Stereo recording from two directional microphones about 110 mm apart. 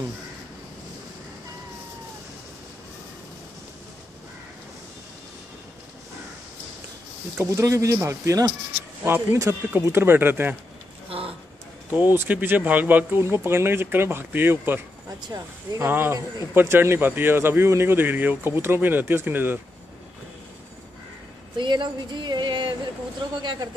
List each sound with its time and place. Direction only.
7.4 s speech: 30° right (ahead or behind)
11.1 s a sound: 60° right (ahead or behind)
11.9 s speech: 15° right (ahead or behind)
15.1 s speech: 35° right (ahead or behind)
15.9 s speech: 20° right (ahead or behind)
21.5 s speech: 45° right (ahead or behind)